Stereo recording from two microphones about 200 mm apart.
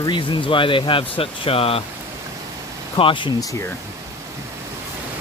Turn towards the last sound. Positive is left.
turn(degrees=20)  # may be behind; listen again after turning